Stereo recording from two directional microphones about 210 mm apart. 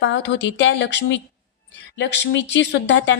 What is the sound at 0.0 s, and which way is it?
A woman's voice, 60° left (ahead or behind).